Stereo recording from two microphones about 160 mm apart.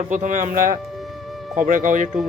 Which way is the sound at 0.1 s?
50° right (ahead or behind).